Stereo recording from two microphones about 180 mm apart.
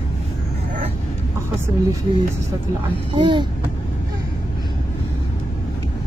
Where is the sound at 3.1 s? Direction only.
25° right (ahead or behind).